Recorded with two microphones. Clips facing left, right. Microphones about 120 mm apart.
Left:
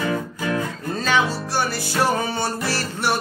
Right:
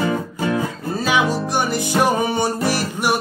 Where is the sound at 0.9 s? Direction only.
10° right (ahead or behind).